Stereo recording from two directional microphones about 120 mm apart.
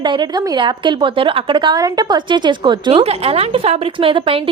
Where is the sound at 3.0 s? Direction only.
55° right (ahead or behind).